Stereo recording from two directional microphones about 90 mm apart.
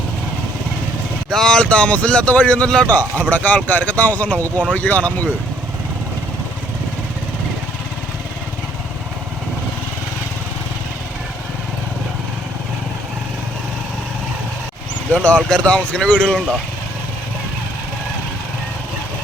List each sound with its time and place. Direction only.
1.3 s speech: 5° left (ahead or behind)
15.1 s speech: 15° left (ahead or behind)